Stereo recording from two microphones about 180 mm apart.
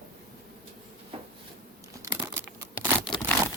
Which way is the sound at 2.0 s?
15° right (ahead or behind).